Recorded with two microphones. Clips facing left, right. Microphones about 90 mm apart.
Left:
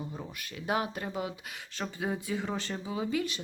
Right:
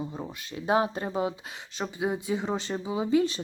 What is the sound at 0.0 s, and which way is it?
Speech, 25° right (ahead or behind).